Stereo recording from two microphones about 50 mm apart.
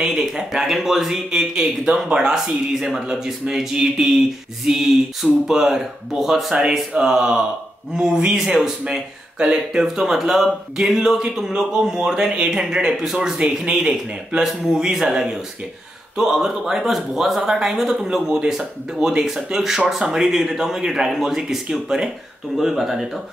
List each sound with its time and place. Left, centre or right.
0.0 s speech: centre